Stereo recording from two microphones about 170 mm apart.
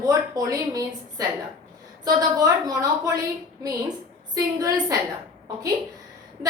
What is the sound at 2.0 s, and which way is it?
A woman's voice, 20° right (ahead or behind).